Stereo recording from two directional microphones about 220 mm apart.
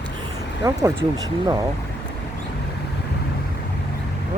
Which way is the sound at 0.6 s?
15° right (ahead or behind).